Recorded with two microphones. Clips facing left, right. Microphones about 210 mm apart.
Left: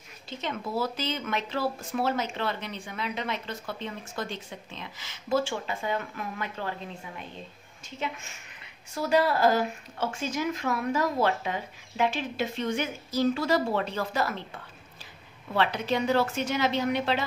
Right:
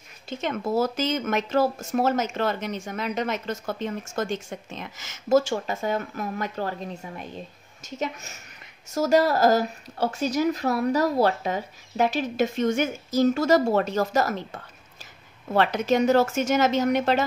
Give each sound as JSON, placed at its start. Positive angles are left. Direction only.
{"t": 0.3, "sound": "a woman's voice", "side_deg": -50}